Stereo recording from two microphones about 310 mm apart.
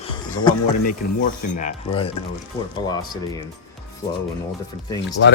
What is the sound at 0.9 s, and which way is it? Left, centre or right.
Speech, left.